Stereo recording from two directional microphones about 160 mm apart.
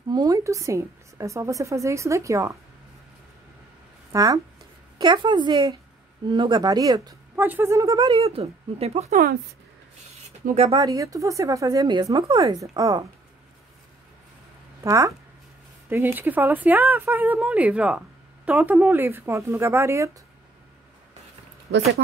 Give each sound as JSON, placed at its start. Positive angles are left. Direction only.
{"t": 0.1, "sound": "a woman's voice", "side_deg": -25}
{"t": 4.1, "sound": "a woman's voice", "side_deg": -20}
{"t": 7.3, "sound": "speech", "side_deg": -10}
{"t": 8.1, "sound": "speech", "side_deg": -40}
{"t": 9.1, "sound": "speech", "side_deg": -65}
{"t": 10.5, "sound": "speech", "side_deg": -40}
{"t": 10.8, "sound": "a woman's voice", "side_deg": -20}
{"t": 14.8, "sound": "speech", "side_deg": -20}